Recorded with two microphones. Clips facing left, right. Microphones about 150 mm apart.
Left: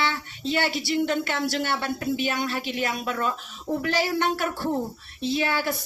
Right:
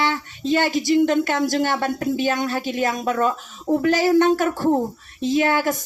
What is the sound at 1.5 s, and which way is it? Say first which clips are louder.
Speech: right 6 dB; 45° right (ahead or behind).